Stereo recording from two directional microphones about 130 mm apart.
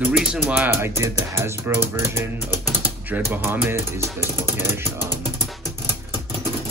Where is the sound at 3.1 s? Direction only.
15° right (ahead or behind).